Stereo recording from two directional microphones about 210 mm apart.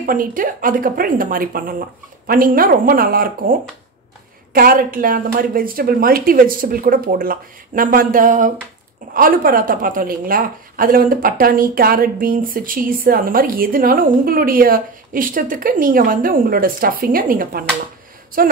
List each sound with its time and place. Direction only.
0.0 s speech: 40° right (ahead or behind)
4.6 s speech: 45° right (ahead or behind)